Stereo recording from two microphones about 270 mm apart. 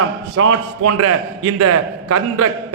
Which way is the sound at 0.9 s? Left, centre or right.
Right.